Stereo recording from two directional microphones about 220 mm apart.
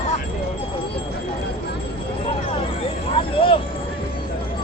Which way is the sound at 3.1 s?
25° left (ahead or behind).